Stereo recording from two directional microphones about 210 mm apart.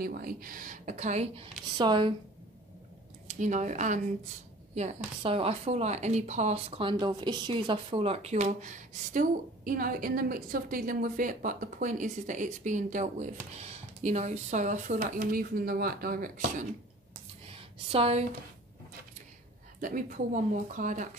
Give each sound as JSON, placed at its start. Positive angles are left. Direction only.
{"t": 0.0, "sound": "a woman's voice", "side_deg": -45}
{"t": 3.3, "sound": "a woman's voice", "side_deg": -35}
{"t": 17.9, "sound": "speech", "side_deg": -30}
{"t": 19.8, "sound": "a woman's voice", "side_deg": -40}